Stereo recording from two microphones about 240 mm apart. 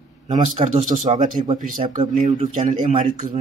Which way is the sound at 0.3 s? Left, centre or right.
Right.